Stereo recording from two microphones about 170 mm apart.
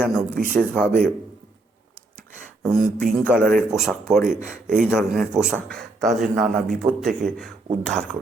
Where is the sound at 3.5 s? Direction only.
5° right (ahead or behind).